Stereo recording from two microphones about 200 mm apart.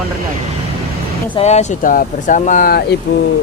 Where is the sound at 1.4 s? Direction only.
35° left (ahead or behind).